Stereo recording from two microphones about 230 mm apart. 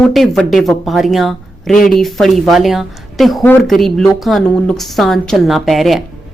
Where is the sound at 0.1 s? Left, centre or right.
Centre.